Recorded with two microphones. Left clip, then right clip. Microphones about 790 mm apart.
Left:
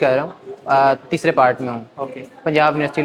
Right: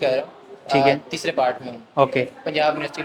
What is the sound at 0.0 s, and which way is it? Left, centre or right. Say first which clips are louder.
Speech: left 5 dB; left.